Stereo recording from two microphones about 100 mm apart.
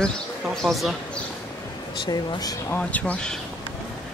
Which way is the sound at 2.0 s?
45° left (ahead or behind).